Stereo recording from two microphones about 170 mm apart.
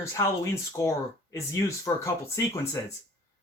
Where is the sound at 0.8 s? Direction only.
20° left (ahead or behind).